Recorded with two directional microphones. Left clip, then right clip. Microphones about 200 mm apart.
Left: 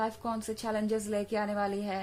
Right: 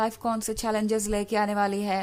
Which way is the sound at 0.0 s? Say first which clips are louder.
Right 6 dB; 35° right (ahead or behind).